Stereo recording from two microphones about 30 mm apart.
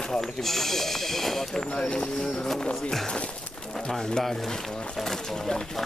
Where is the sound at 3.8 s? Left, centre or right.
Left.